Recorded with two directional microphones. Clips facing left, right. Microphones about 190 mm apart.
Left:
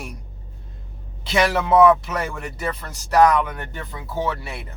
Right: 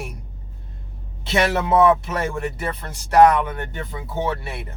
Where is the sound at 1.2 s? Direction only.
25° right (ahead or behind).